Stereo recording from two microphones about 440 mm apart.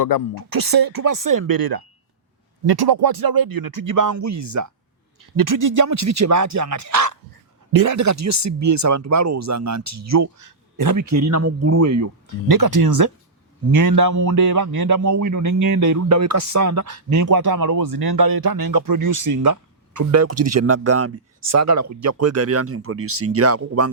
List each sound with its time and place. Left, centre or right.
0.3 s a man's voice: right